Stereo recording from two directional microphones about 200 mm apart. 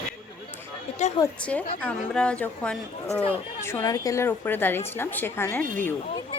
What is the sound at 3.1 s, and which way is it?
Speech, 15° right (ahead or behind).